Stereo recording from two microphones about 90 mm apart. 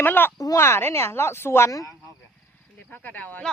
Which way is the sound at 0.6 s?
25° left (ahead or behind).